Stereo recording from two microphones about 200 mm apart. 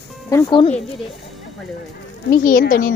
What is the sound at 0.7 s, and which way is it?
Speech, centre (ahead or behind).